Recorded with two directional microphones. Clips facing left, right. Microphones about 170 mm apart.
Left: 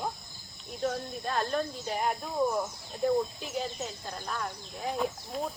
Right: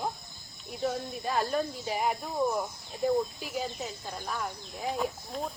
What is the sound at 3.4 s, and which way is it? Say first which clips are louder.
Speech: even; 10° right (ahead or behind).